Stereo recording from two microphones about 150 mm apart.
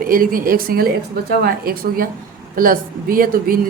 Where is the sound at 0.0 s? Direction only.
70° right (ahead or behind).